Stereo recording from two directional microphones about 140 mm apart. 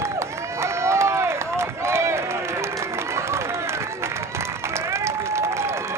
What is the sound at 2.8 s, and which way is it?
Applause, 20° right (ahead or behind).